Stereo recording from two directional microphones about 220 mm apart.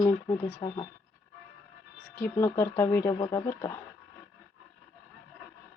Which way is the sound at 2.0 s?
10° left (ahead or behind).